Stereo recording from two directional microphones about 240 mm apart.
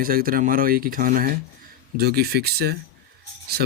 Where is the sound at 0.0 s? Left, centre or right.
Right.